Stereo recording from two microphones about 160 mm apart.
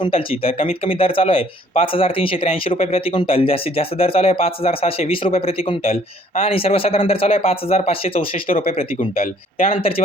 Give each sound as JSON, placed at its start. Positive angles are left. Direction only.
{"t": 0.0, "sound": "speech", "side_deg": 35}
{"t": 8.4, "sound": "speech", "side_deg": 60}